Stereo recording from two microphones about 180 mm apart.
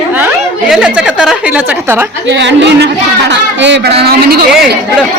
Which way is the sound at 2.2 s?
75° right (ahead or behind).